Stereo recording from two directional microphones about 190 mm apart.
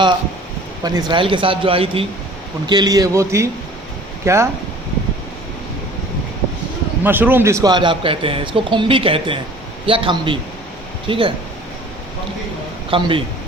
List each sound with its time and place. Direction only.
0.9 s a man's voice: 20° right (ahead or behind)
7.0 s speech: 10° right (ahead or behind); by 11.3 s 25° right (ahead or behind)
12.9 s speech: 30° right (ahead or behind)